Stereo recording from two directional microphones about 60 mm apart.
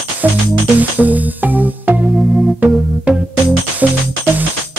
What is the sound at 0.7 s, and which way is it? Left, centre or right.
Music, right.